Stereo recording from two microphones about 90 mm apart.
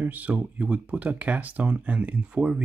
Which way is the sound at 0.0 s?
20° right (ahead or behind).